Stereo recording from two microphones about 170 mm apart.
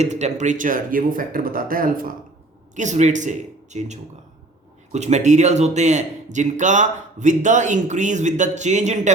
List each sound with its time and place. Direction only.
0.0 s a man's voice: 40° right (ahead or behind)
2.7 s speech: 45° right (ahead or behind)